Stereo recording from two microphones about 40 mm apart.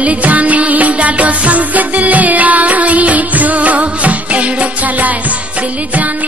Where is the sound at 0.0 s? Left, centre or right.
Right.